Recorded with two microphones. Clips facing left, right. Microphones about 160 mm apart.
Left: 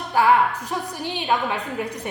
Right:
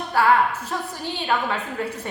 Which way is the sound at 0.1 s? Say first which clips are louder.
Left 1 dB; 15° left (ahead or behind).